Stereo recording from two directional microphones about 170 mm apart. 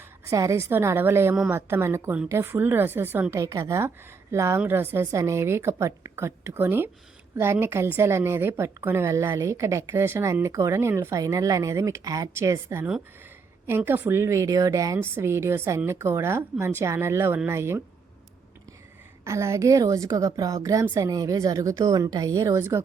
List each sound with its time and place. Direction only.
0.3 s a woman's voice: 15° right (ahead or behind)
19.2 s a woman's voice: 15° right (ahead or behind)